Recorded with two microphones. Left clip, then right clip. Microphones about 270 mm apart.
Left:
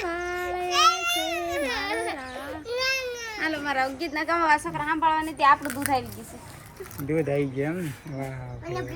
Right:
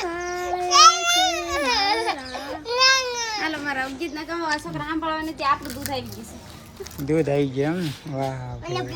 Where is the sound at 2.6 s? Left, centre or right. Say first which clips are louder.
Right 9 dB; centre.